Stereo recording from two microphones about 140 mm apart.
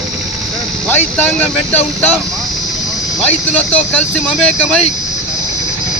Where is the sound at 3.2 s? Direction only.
10° left (ahead or behind).